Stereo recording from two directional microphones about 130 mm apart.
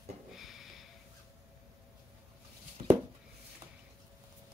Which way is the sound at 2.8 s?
65° right (ahead or behind).